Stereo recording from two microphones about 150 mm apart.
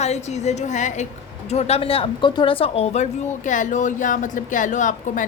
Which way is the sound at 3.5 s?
55° left (ahead or behind).